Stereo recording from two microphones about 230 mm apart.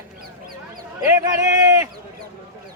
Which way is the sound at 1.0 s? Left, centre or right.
Centre.